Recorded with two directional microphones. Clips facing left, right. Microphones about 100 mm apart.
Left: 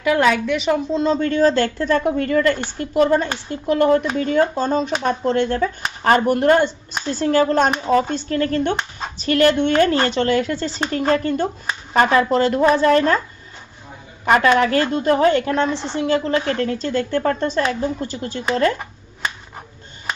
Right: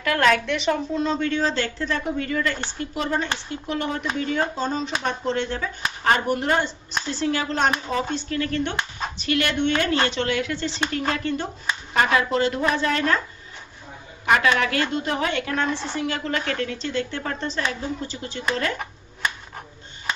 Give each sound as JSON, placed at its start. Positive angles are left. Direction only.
{"t": 0.0, "sound": "a woman's voice", "side_deg": 10}
{"t": 1.0, "sound": "speech", "side_deg": 40}
{"t": 14.3, "sound": "speech", "side_deg": 40}